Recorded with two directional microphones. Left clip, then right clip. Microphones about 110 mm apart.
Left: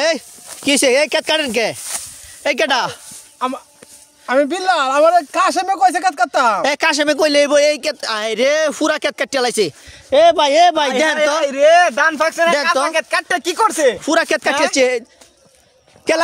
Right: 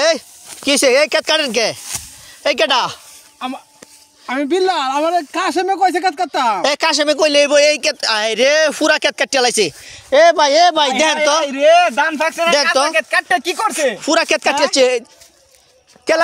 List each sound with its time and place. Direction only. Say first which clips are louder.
0.0 s speech: right 2 dB; 40° left (ahead or behind)
7.5 s speech: right 2 dB; 20° left (ahead or behind)
11.4 s speech: left 1 dB; 45° left (ahead or behind); by 15.0 s 30° left (ahead or behind)
16.1 s speech: right 2 dB; 50° left (ahead or behind)